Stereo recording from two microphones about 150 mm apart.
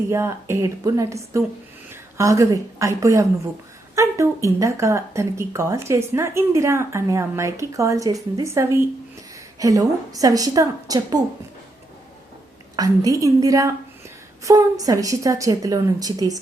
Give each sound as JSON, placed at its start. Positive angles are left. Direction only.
{"t": 0.1, "sound": "a woman's voice", "side_deg": -15}
{"t": 12.7, "sound": "speech", "side_deg": -25}